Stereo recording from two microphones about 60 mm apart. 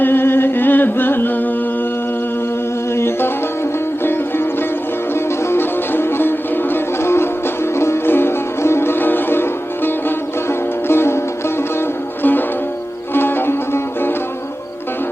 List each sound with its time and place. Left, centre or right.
0.0 s music: left
2.9 s music: left
12.2 s music: left